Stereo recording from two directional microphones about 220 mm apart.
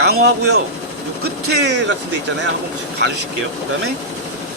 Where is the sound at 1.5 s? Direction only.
50° right (ahead or behind).